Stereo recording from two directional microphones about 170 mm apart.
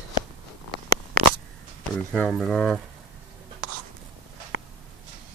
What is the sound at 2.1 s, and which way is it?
Speech, 5° left (ahead or behind).